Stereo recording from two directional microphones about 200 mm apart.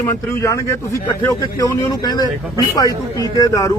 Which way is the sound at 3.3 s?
15° left (ahead or behind).